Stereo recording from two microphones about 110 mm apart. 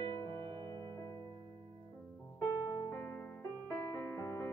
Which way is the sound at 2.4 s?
30° left (ahead or behind).